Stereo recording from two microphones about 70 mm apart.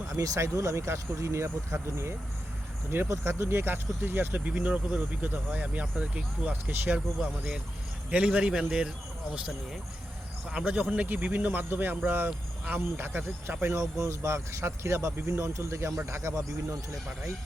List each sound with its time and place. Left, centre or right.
0.1 s speech: right
8.1 s speech: centre
10.7 s speech: centre
13.7 s speech: right